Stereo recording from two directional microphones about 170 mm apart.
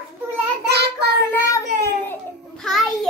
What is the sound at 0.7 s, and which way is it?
Child singing, 75° right (ahead or behind).